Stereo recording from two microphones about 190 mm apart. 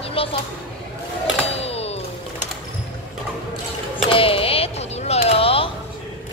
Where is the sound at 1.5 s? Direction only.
30° left (ahead or behind).